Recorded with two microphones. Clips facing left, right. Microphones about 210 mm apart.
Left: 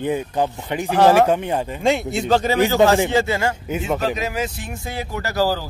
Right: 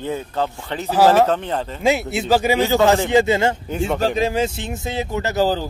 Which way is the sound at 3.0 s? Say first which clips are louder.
Right 4 dB; 20° right (ahead or behind).